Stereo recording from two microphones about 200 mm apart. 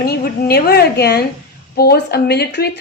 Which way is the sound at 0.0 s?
50° left (ahead or behind).